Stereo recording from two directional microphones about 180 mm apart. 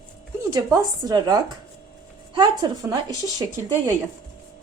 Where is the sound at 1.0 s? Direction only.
20° right (ahead or behind).